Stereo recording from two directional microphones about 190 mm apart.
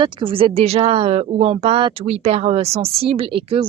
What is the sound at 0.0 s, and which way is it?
Speech, 25° right (ahead or behind).